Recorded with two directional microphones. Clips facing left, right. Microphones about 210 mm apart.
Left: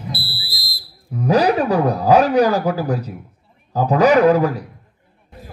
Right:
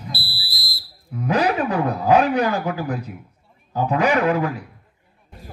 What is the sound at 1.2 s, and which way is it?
A man's voice, 35° left (ahead or behind).